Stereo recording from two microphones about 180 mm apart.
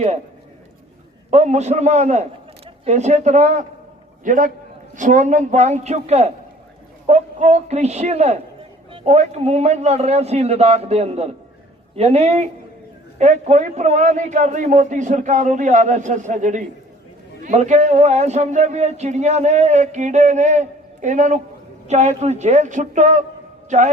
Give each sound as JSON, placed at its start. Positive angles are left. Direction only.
{"t": 1.3, "sound": "a man's voice", "side_deg": -40}